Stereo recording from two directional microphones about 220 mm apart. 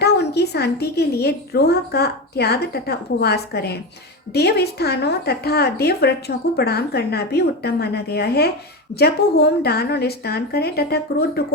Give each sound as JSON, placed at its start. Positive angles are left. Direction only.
{"t": 0.0, "sound": "a woman's voice", "side_deg": 50}